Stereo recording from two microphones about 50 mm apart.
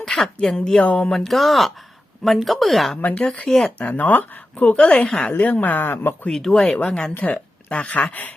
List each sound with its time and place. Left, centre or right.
0.0 s a sound: centre
0.4 s speech: centre
0.8 s speech: left
1.1 s speech: centre
3.1 s speech: left
3.6 s speech: left
6.2 s speech: centre; by 8.3 s left